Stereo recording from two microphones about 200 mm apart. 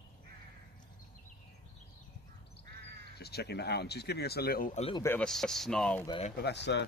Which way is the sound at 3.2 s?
55° left (ahead or behind).